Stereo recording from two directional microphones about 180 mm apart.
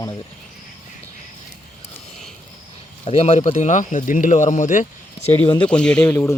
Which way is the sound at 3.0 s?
35° left (ahead or behind).